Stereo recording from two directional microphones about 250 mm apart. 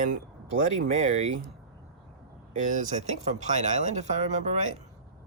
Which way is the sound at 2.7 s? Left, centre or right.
Right.